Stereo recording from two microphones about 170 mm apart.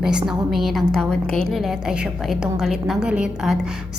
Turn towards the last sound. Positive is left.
turn(degrees=-5)  # may be behind; listen again after turning